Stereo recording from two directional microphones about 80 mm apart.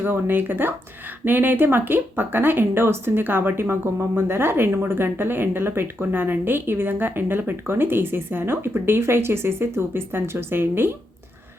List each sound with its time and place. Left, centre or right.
0.0 s speech: right